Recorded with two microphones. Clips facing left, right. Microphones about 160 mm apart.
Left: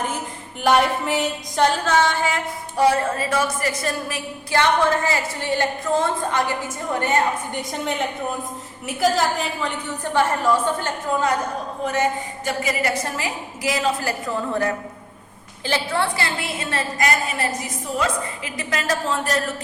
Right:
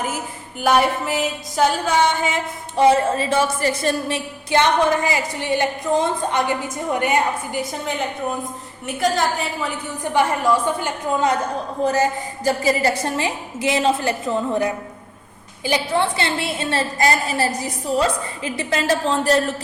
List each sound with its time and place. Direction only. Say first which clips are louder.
0.6 s music: right 1 dB; centre (ahead or behind)
7.6 s a woman's voice: left 1 dB; centre (ahead or behind)
10.0 s music: right 1 dB; 15° right (ahead or behind)
12.5 s a woman's voice: right 5 dB; 30° right (ahead or behind)